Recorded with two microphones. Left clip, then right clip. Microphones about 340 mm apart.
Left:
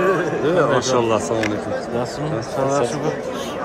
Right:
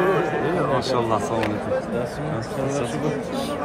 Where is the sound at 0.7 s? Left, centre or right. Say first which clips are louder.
Left 4 dB; centre.